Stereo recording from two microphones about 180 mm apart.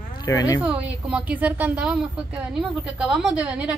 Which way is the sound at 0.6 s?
5° right (ahead or behind).